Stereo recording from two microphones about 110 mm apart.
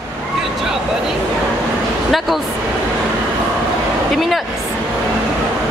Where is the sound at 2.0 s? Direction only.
Centre (ahead or behind).